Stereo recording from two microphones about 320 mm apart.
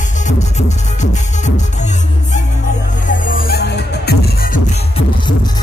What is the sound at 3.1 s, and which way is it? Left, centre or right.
Music, left.